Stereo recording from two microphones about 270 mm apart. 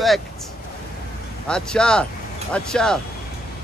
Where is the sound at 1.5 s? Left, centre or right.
Centre.